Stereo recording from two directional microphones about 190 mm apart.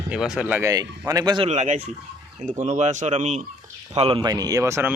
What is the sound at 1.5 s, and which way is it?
Speech, 40° right (ahead or behind).